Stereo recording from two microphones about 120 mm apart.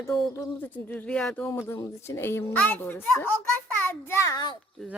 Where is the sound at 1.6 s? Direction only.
20° left (ahead or behind).